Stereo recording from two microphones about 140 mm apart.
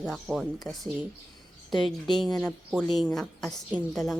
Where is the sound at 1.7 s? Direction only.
35° left (ahead or behind).